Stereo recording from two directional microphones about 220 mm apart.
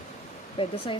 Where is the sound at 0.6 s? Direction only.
25° left (ahead or behind).